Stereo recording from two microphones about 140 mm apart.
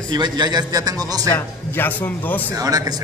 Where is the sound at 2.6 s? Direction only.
25° right (ahead or behind).